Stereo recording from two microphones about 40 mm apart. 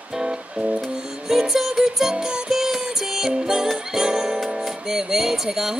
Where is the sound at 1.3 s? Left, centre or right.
Centre.